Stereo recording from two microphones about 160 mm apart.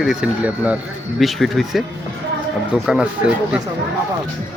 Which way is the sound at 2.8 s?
5° right (ahead or behind).